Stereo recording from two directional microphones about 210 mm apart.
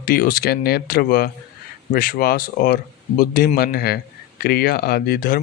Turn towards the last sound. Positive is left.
turn(degrees=45)  # may be behind; listen again after turning